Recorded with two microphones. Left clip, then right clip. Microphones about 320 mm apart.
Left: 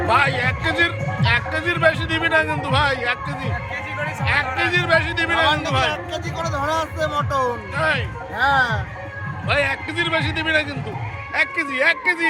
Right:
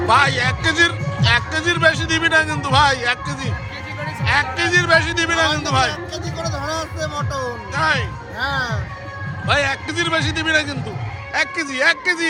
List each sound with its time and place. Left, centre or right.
0.1 s a man's voice: centre
6.5 s music: left
8.4 s speech: left
9.5 s a man's voice: centre